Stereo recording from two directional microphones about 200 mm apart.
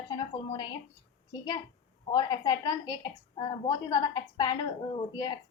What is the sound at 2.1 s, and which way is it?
A woman's voice, 20° left (ahead or behind).